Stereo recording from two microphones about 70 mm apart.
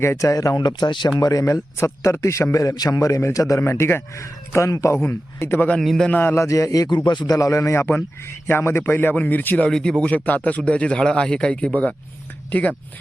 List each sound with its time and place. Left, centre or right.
0.0 s speech: left
0.3 s speech: left
1.2 s a man's voice: left
3.6 s speech: left
4.2 s a man's voice: left
4.9 s speech: left
5.8 s a man's voice: centre
6.1 s a man's voice: left
6.3 s a man's voice: left
6.8 s speech: left
7.3 s a man's voice: left
7.9 s a man's voice: left
9.6 s a man's voice: centre
10.2 s a man's voice: left